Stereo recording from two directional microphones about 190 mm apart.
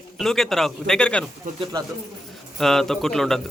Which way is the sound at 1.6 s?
20° right (ahead or behind).